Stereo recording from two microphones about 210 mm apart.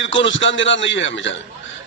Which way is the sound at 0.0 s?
60° left (ahead or behind).